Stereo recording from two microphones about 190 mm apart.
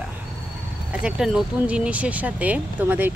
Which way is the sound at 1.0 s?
5° right (ahead or behind).